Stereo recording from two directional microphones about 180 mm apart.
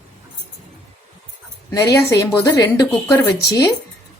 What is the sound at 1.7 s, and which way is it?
A woman's voice, 20° left (ahead or behind).